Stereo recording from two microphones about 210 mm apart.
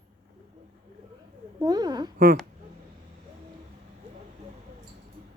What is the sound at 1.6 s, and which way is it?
Speech, 20° right (ahead or behind).